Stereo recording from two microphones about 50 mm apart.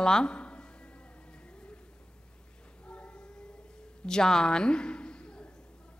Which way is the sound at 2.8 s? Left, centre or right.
Left.